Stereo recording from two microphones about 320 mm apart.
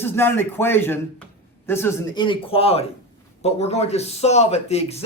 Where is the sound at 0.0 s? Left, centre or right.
Centre.